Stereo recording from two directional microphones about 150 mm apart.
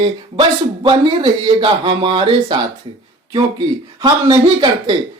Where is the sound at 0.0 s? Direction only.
30° right (ahead or behind).